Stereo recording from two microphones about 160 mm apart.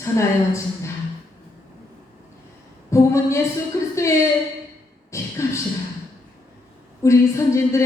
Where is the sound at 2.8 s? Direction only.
20° left (ahead or behind).